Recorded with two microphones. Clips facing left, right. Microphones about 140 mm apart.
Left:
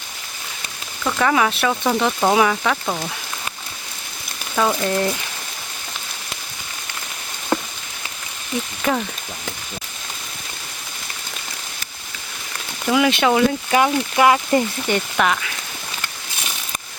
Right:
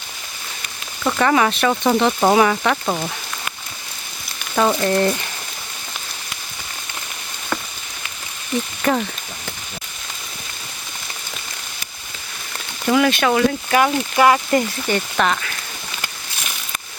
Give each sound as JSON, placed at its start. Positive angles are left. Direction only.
{"t": 1.2, "sound": "speech", "side_deg": 0}
{"t": 1.7, "sound": "speech", "side_deg": -15}
{"t": 2.3, "sound": "speech", "side_deg": 0}
{"t": 4.5, "sound": "speech", "side_deg": -10}
{"t": 4.8, "sound": "speech", "side_deg": 5}
{"t": 7.5, "sound": "a sound", "side_deg": 35}
{"t": 8.8, "sound": "speech", "side_deg": 0}
{"t": 12.8, "sound": "speech", "side_deg": 0}
{"t": 13.1, "sound": "speech", "side_deg": 15}
{"t": 15.1, "sound": "speech", "side_deg": 5}